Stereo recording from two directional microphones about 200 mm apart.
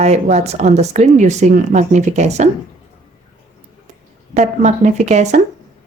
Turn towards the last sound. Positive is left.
turn(degrees=-35)  # may be behind; listen again after turning